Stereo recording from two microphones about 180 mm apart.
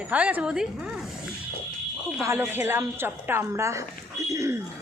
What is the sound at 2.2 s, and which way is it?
Speech, 15° right (ahead or behind).